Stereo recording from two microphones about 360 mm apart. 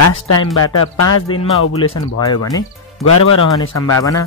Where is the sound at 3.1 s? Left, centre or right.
Left.